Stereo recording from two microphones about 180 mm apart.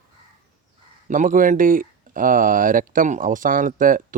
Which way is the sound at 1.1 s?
45° right (ahead or behind).